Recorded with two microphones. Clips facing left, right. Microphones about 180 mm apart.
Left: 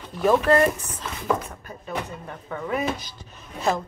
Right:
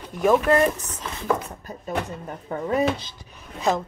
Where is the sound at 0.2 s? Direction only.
10° right (ahead or behind).